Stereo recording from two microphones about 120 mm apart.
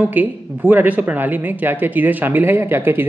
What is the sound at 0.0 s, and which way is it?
Speech, 15° right (ahead or behind).